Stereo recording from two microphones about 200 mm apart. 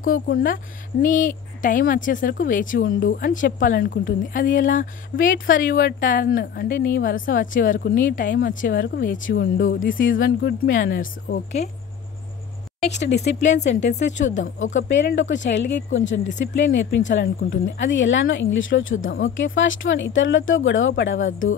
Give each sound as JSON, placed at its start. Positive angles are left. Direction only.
{"t": 0.0, "sound": "a woman's voice", "side_deg": 45}
{"t": 11.0, "sound": "speech", "side_deg": 40}
{"t": 12.9, "sound": "speech", "side_deg": 60}